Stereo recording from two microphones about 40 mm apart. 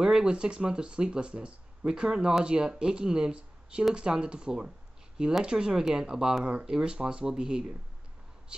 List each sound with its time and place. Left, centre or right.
0.0 s speech: right
6.4 s speech: right